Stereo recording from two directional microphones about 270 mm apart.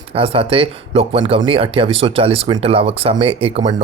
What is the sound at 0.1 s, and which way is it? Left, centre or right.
Speech, right.